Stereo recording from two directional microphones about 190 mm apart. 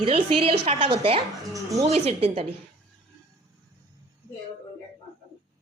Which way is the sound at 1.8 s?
35° right (ahead or behind).